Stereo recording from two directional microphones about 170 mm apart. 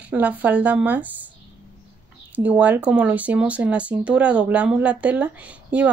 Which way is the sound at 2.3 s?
10° right (ahead or behind).